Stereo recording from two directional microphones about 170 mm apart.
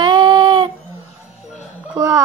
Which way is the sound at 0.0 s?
30° right (ahead or behind).